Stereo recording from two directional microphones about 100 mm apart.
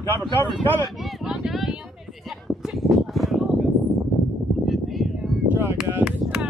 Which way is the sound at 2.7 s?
Centre (ahead or behind).